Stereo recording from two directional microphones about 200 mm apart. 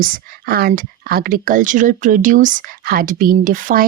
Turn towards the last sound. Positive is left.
turn(degrees=-45)  # may be behind; listen again after turning